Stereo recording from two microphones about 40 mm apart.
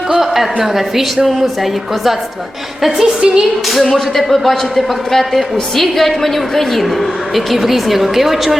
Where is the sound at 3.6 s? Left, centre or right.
Centre.